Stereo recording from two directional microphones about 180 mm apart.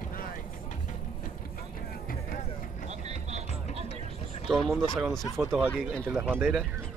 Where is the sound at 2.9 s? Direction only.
35° right (ahead or behind).